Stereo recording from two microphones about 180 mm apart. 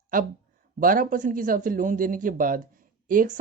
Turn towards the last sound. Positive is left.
turn(degrees=-50)  # may be behind; listen again after turning